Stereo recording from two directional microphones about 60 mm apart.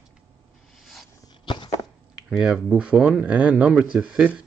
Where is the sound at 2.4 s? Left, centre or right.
Centre.